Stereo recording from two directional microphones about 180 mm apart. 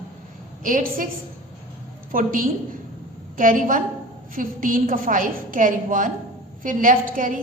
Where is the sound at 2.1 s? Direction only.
50° right (ahead or behind).